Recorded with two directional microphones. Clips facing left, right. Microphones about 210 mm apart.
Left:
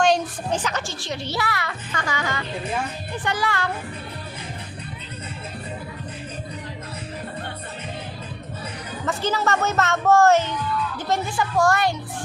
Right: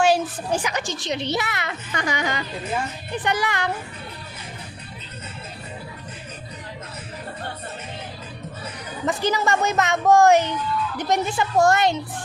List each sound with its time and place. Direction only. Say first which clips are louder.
0.0 s a child's voice: right 1 dB; 10° right (ahead or behind)
9.0 s a child's voice: right 1 dB; 15° right (ahead or behind)